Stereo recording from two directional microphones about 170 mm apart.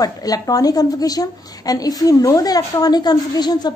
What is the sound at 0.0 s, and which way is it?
A woman's voice, 20° left (ahead or behind).